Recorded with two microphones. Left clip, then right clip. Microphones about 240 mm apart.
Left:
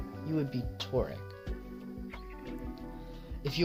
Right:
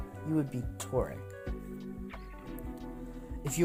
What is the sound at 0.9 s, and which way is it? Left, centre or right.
Speech, right.